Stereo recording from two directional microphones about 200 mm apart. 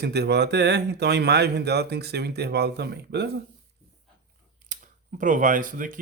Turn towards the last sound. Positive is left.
turn(degrees=-45)  # may be behind; listen again after turning